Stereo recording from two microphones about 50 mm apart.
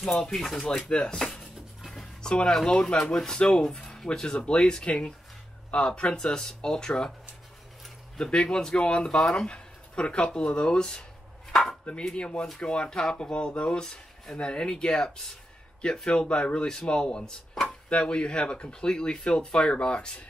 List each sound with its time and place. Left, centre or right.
0.0 s speech: centre
0.8 s speech: centre
1.1 s chopping: centre
2.2 s speech: centre
8.2 s speech: centre